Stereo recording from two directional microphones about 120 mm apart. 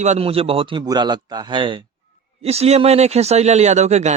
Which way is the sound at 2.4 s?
60° right (ahead or behind).